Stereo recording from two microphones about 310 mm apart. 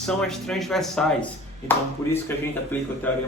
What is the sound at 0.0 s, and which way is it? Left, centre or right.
Speech, centre.